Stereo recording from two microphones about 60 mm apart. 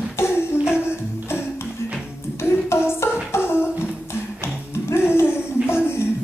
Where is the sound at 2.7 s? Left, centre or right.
Left.